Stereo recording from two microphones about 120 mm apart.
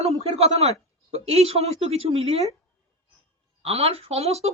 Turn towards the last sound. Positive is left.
turn(degrees=-60)  # may be behind; listen again after turning